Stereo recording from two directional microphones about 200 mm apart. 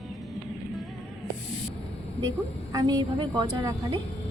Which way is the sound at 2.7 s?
20° right (ahead or behind).